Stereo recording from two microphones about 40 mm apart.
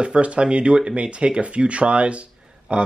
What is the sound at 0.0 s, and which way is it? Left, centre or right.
Speech, right.